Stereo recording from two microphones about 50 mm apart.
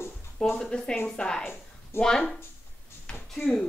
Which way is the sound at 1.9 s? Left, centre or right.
Left.